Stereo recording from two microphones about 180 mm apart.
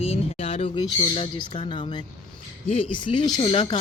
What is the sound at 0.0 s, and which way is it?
Speech, 35° left (ahead or behind).